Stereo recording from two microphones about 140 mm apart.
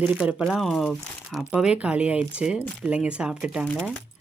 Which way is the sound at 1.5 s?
10° right (ahead or behind).